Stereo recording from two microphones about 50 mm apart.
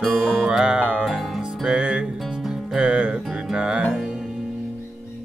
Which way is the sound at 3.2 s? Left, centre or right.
Centre.